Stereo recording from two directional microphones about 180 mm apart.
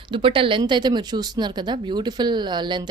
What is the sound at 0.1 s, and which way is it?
Speech, 30° right (ahead or behind).